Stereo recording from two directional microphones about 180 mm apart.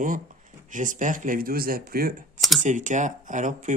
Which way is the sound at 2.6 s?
45° right (ahead or behind).